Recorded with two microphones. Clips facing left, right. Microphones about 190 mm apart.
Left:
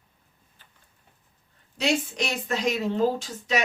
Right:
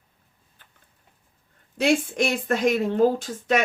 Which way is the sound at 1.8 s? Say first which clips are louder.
Right 5 dB; 55° right (ahead or behind).